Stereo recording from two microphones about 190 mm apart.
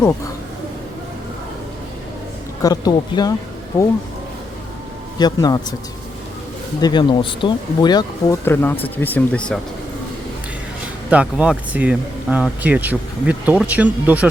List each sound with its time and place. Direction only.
2.6 s speech: 20° left (ahead or behind)
5.1 s speech: 20° left (ahead or behind)
6.8 s speech: 25° left (ahead or behind); by 9.6 s 5° left (ahead or behind)
11.1 s speech: 5° right (ahead or behind)